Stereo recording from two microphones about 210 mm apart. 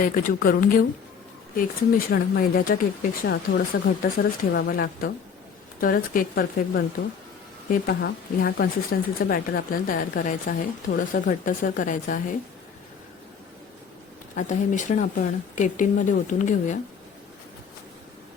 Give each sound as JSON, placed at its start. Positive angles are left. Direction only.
{"t": 0.0, "sound": "speech", "side_deg": 40}
{"t": 3.7, "sound": "speech", "side_deg": 55}
{"t": 14.3, "sound": "speech", "side_deg": 35}